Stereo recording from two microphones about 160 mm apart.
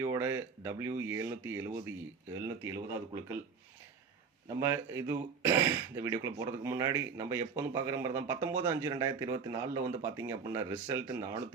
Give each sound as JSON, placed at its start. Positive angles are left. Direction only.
{"t": 0.0, "sound": "speech", "side_deg": -15}
{"t": 4.4, "sound": "speech", "side_deg": -20}